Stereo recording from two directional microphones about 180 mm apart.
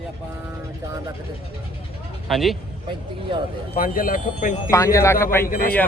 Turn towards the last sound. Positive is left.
turn(degrees=55)  # may be behind; listen again after turning